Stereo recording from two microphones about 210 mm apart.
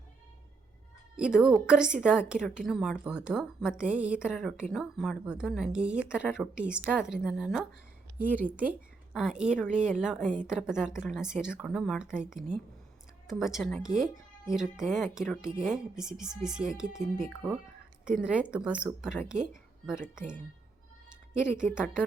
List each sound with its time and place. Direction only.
1.1 s a woman's voice: 5° right (ahead or behind)
18.2 s a woman's voice: 5° right (ahead or behind)
21.6 s a woman's voice: 5° right (ahead or behind)